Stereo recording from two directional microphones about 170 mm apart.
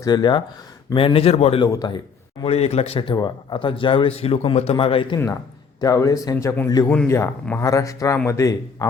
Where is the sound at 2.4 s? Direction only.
35° left (ahead or behind).